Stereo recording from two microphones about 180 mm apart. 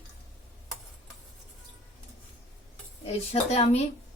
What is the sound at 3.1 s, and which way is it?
Speech, 35° left (ahead or behind).